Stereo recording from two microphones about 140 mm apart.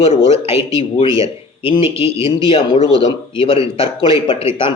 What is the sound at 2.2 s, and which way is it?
Speech, 40° left (ahead or behind).